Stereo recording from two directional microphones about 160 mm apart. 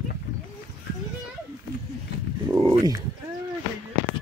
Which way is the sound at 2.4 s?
20° right (ahead or behind).